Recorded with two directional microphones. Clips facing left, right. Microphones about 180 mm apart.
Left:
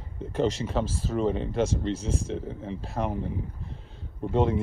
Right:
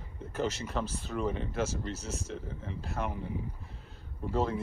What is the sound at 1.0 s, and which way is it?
Speech, 35° left (ahead or behind).